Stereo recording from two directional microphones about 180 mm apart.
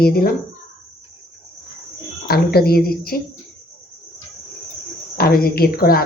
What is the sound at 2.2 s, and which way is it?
Speech, 60° left (ahead or behind).